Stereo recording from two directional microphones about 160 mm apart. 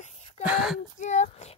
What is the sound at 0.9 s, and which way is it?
Speech, 50° left (ahead or behind).